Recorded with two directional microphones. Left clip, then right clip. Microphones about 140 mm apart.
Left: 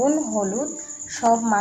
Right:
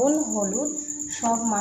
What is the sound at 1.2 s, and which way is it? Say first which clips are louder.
Speech: left 6 dB; 90° left.